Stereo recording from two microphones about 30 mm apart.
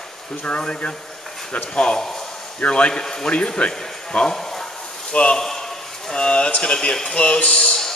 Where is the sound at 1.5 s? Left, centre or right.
Left.